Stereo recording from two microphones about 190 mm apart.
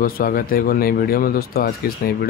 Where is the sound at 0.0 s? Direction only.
50° left (ahead or behind).